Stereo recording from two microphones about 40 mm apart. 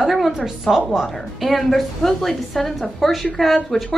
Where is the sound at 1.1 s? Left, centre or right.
Centre.